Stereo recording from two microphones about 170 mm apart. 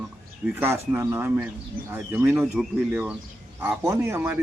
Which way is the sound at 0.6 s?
15° right (ahead or behind).